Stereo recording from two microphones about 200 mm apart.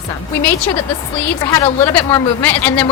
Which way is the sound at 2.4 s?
10° left (ahead or behind).